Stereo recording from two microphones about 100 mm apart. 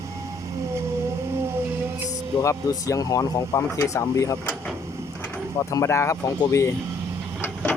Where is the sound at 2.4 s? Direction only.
35° left (ahead or behind).